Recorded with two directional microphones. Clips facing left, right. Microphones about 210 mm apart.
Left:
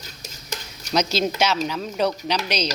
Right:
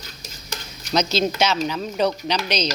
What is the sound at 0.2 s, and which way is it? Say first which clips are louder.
Stir: left 2 dB; 40° left (ahead or behind).